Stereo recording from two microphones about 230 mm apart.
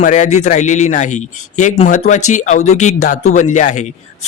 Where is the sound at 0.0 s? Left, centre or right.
Left.